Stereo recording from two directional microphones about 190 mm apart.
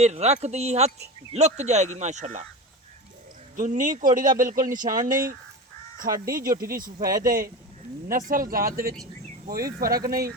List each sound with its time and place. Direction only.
0.0 s speech: 35° right (ahead or behind)
3.5 s speech: 45° right (ahead or behind)
4.9 s speech: 20° right (ahead or behind)
6.3 s speech: 45° right (ahead or behind)
9.8 s speech: 20° right (ahead or behind)
10.1 s speech: 50° right (ahead or behind)